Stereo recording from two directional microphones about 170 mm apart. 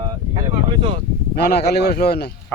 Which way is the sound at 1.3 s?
70° left (ahead or behind).